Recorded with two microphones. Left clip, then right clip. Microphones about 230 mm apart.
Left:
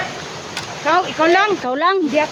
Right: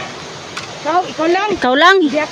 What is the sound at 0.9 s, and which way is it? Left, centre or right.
Speech, right.